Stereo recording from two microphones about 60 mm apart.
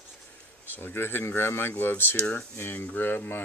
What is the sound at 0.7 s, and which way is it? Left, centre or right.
Speech, left.